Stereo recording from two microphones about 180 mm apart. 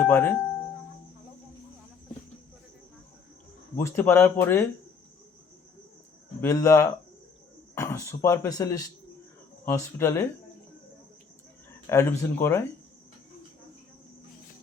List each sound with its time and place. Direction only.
0.0 s speech: 10° left (ahead or behind)
3.8 s speech: 10° left (ahead or behind)
6.4 s speech: 15° left (ahead or behind)
11.9 s speech: 15° left (ahead or behind)